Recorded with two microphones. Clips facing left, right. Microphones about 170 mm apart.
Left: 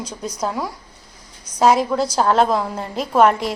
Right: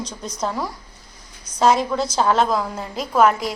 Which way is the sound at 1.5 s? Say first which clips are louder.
Left 3 dB; 40° left (ahead or behind).